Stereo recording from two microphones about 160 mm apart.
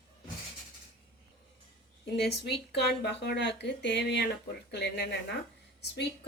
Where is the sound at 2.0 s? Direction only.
90° left.